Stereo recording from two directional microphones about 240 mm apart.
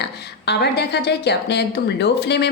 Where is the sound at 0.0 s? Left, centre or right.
Left.